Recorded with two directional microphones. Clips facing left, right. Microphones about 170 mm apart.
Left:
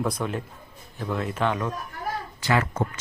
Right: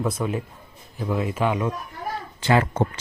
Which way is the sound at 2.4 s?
30° right (ahead or behind).